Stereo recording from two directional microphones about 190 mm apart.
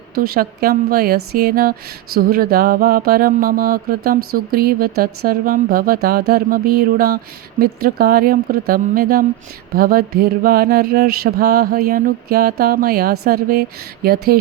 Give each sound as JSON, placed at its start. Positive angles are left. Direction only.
{"t": 0.2, "sound": "mantra", "side_deg": -50}